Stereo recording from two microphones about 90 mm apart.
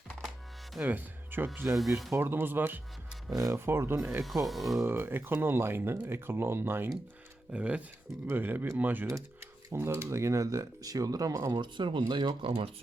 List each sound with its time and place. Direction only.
0.8 s speech: 20° right (ahead or behind)
3.2 s speech: 30° right (ahead or behind)
4.2 s speech: centre (ahead or behind)
4.8 s speech: 25° right (ahead or behind)
7.5 s speech: 15° right (ahead or behind)
9.1 s speech: 35° right (ahead or behind)
11.5 s speech: 65° right (ahead or behind); by 12.7 s 85° right